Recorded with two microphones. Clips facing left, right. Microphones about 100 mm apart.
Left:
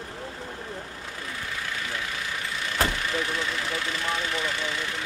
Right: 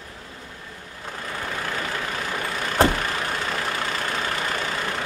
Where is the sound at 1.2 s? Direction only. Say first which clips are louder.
Right 5 dB; 50° right (ahead or behind).